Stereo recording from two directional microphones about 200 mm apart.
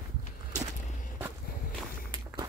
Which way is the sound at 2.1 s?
20° right (ahead or behind).